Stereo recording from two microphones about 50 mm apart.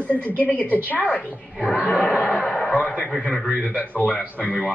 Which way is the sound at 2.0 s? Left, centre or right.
Left.